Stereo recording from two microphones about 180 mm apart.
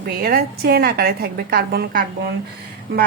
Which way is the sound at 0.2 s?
60° right (ahead or behind).